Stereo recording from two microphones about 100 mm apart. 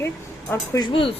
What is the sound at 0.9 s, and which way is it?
Speech, 65° left (ahead or behind).